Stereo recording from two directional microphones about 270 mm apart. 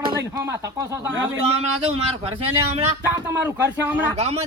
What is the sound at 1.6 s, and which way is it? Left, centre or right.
A man's voice, right.